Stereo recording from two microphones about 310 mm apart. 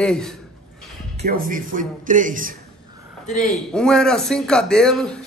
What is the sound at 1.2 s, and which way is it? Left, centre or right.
Speech, right.